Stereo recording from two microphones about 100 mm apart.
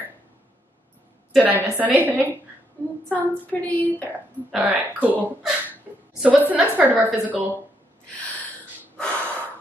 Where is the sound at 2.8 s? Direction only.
15° left (ahead or behind).